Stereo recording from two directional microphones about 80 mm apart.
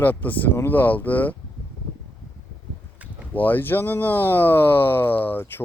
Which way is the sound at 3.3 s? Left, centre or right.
Left.